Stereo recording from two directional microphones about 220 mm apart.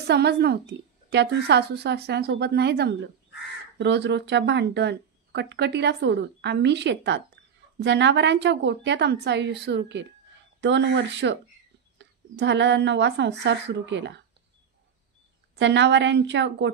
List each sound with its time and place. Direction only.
0.0 s a woman's voice: 50° right (ahead or behind)
15.6 s speech: 55° right (ahead or behind)